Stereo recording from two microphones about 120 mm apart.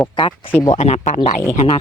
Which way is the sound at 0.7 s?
75° left (ahead or behind).